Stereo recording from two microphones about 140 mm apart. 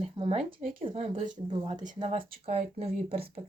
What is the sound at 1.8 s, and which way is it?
Speech, 50° right (ahead or behind).